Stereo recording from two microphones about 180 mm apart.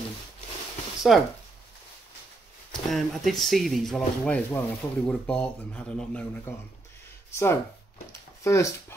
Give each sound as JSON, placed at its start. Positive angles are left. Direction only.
{"t": 1.1, "sound": "speech", "side_deg": 0}
{"t": 2.7, "sound": "speech", "side_deg": 0}